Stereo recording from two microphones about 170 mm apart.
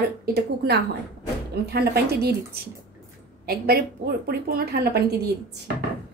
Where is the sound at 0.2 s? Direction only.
70° right (ahead or behind).